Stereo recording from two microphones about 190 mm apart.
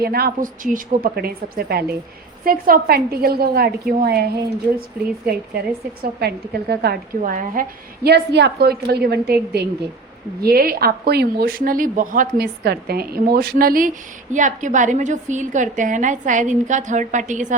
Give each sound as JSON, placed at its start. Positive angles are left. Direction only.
{"t": 0.0, "sound": "speech", "side_deg": -55}
{"t": 6.0, "sound": "a woman's voice", "side_deg": -55}